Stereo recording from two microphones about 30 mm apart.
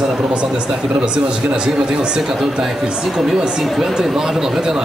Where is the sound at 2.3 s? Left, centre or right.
Centre.